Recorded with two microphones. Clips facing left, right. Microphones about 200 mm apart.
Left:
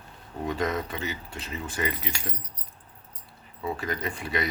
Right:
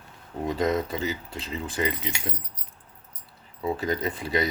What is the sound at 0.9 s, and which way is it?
Speech, 35° right (ahead or behind).